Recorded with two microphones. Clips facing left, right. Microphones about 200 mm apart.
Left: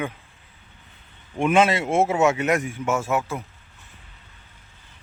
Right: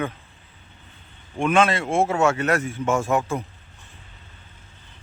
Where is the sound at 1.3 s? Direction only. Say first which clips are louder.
Left 1 dB; 20° left (ahead or behind); by 3.4 s 5° left (ahead or behind).